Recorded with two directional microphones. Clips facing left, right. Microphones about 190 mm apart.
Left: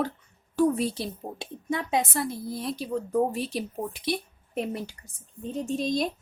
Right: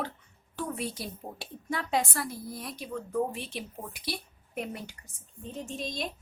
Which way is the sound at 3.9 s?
25° left (ahead or behind).